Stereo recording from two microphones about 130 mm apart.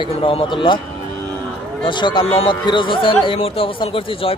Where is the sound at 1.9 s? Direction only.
35° left (ahead or behind).